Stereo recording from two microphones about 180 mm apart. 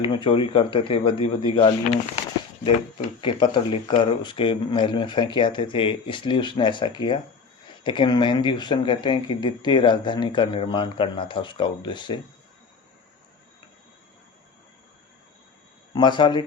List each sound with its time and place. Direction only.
0.0 s speech: 30° left (ahead or behind)
3.2 s speech: 25° left (ahead or behind)
16.0 s speech: 25° left (ahead or behind)